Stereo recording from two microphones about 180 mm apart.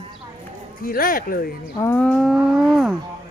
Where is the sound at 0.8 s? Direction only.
50° left (ahead or behind).